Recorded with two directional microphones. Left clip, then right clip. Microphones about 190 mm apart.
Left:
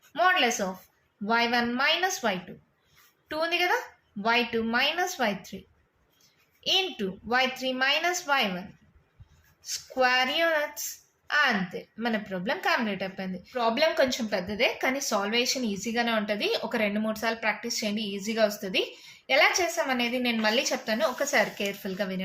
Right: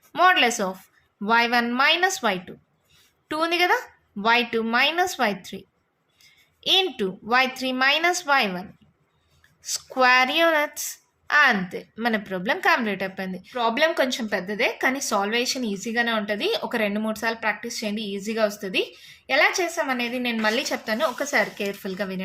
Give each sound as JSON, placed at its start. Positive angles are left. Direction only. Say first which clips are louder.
{"t": 0.1, "sound": "a sound", "louder": "right 5 dB", "side_deg": -45}
{"t": 1.2, "sound": "a woman's voice", "louder": "right 5 dB", "side_deg": -40}
{"t": 6.6, "sound": "a woman's voice", "louder": "right 5 dB", "side_deg": -40}
{"t": 9.6, "sound": "a woman's voice", "louder": "right 6 dB", "side_deg": -45}